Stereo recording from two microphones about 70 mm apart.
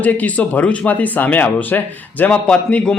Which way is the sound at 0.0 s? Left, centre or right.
Left.